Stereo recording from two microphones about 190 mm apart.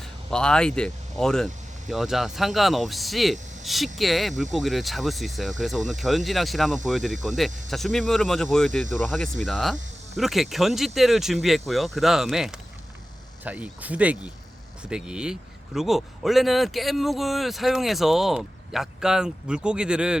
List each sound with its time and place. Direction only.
0.3 s speech: 5° left (ahead or behind)